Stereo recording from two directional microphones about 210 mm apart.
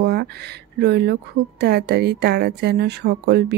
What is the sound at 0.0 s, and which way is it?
A woman's voice, 50° right (ahead or behind).